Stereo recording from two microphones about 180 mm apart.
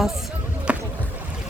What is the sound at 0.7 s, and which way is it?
Boat, 5° right (ahead or behind).